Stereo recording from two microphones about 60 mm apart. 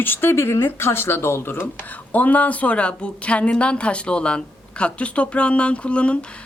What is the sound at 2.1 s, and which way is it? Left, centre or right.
A woman's voice, left.